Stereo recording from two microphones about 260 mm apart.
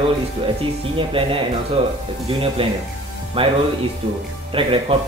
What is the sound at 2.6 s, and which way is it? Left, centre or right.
A man's voice, right.